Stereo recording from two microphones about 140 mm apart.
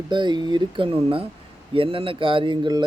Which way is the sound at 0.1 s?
30° right (ahead or behind).